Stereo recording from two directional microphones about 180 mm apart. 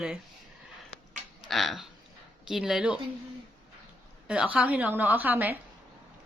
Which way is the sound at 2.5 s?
Centre (ahead or behind).